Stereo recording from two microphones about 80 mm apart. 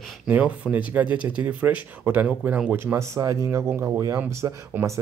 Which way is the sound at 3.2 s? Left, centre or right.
Right.